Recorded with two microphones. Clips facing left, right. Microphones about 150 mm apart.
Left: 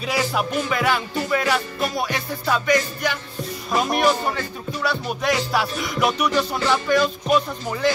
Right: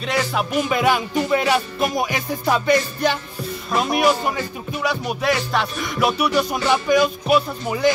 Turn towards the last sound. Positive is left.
turn(degrees=-10)  # may be behind; listen again after turning